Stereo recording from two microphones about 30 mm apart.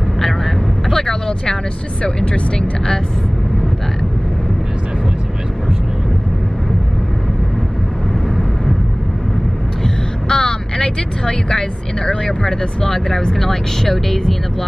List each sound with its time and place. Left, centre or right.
0.8 s vehicle: centre
10.2 s vehicle: left
11.2 s speech: left